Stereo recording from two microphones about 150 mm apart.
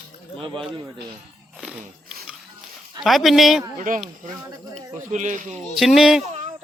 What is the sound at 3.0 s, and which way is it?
Speech, centre (ahead or behind).